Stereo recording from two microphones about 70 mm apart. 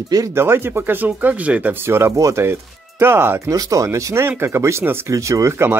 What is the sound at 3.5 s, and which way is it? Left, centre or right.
Speech, right.